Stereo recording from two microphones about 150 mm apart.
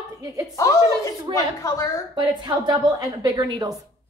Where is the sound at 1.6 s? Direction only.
20° left (ahead or behind).